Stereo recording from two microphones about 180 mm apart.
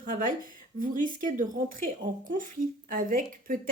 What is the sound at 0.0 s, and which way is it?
Speech, 50° right (ahead or behind).